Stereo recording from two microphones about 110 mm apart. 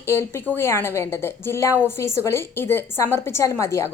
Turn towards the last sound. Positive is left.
turn(degrees=25)  # may be behind; listen again after turning